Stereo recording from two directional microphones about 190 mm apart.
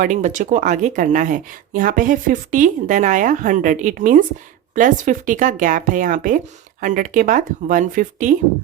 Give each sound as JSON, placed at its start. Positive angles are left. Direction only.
{"t": 0.0, "sound": "speech", "side_deg": -40}